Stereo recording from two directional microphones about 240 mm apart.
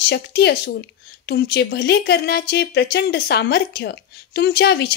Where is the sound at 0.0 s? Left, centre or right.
Left.